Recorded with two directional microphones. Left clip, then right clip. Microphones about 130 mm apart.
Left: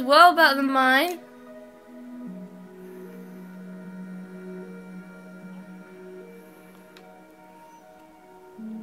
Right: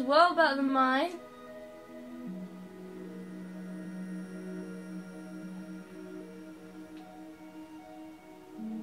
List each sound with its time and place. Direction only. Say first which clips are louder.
0.0 s a woman's voice: left 9 dB; 35° left (ahead or behind)